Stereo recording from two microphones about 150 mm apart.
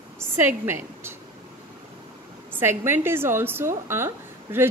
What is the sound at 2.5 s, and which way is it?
A woman's voice, 15° right (ahead or behind).